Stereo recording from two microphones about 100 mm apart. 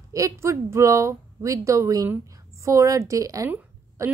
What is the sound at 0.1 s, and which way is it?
A woman's voice, 30° right (ahead or behind).